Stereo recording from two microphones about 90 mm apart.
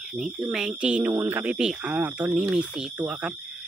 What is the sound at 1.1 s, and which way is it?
Speech, 25° right (ahead or behind).